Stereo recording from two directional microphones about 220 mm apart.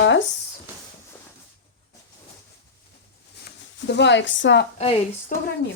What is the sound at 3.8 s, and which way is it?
Speech, 50° left (ahead or behind).